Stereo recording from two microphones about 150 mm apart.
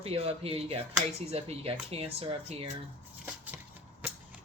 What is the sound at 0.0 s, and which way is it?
Speech, 40° right (ahead or behind).